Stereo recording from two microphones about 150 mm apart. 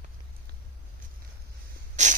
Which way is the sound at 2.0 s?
50° right (ahead or behind).